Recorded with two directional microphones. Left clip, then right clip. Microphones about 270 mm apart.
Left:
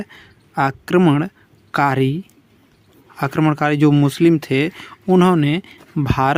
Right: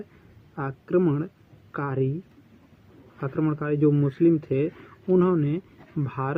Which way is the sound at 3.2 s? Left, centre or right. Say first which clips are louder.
Left 10 dB; left.